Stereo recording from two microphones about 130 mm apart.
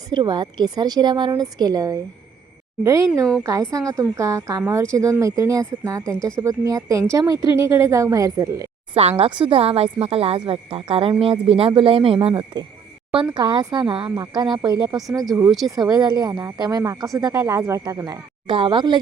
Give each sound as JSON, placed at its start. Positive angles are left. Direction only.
{"t": 0.1, "sound": "a woman's voice", "side_deg": -35}
{"t": 9.0, "sound": "speech", "side_deg": -50}
{"t": 12.3, "sound": "speech", "side_deg": -35}
{"t": 15.4, "sound": "speech", "side_deg": 0}
{"t": 15.7, "sound": "a woman's voice", "side_deg": -30}
{"t": 18.5, "sound": "speech", "side_deg": -40}